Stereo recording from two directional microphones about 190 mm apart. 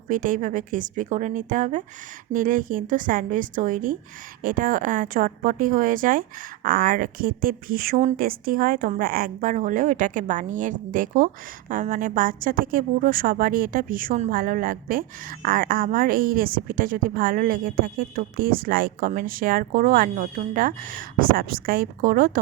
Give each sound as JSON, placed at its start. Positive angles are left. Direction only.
{"t": 0.1, "sound": "a woman's voice", "side_deg": -45}